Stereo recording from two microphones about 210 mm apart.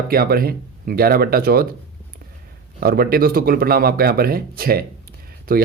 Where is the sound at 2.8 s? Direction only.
45° right (ahead or behind).